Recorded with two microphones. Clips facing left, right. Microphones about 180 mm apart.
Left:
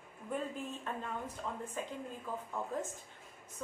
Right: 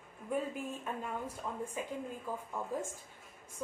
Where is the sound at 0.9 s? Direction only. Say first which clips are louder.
Right 1 dB; 10° right (ahead or behind).